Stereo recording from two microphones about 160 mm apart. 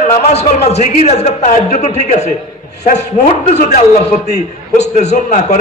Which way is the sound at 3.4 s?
45° left (ahead or behind).